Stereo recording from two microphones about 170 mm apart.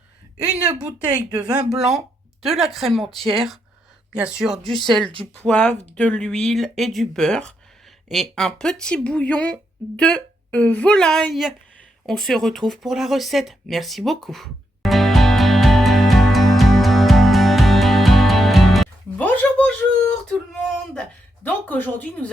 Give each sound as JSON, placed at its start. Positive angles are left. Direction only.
{"t": 0.8, "sound": "speech", "side_deg": -5}
{"t": 1.5, "sound": "speech", "side_deg": -25}
{"t": 2.4, "sound": "speech", "side_deg": 0}
{"t": 12.0, "sound": "a sound", "side_deg": 0}
{"t": 21.4, "sound": "speech", "side_deg": 10}